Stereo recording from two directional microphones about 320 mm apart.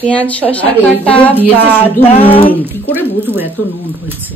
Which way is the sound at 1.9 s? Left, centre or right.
Centre.